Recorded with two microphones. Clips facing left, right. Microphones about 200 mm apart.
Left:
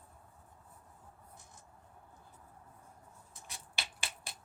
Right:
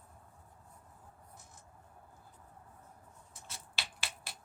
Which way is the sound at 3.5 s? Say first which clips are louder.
Left 1 dB; 15° left (ahead or behind).